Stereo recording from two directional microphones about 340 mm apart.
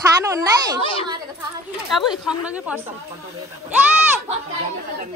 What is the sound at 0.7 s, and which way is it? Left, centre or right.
Speech, centre.